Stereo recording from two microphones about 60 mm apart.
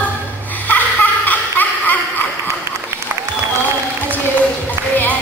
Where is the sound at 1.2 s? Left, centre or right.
Left.